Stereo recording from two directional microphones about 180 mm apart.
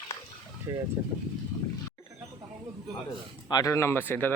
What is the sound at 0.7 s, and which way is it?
Speech, 15° right (ahead or behind).